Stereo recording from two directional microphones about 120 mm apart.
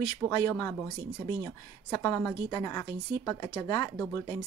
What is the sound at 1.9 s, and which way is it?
Speech, 25° left (ahead or behind).